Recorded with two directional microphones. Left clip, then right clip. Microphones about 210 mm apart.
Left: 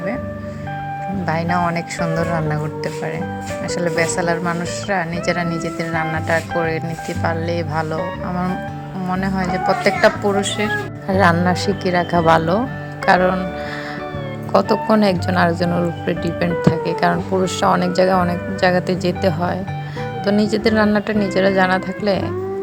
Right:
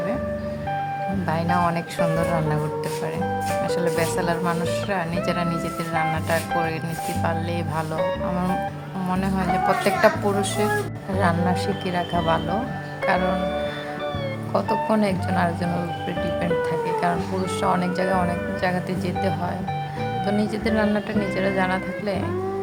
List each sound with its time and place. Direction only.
1.3 s speech: 15° left (ahead or behind)
3.8 s speech: 10° left (ahead or behind)
9.0 s speech: 10° left (ahead or behind)
11.2 s speech: 30° left (ahead or behind)
14.5 s speech: 30° left (ahead or behind)